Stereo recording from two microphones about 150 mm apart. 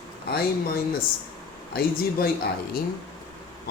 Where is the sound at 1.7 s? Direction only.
90° left.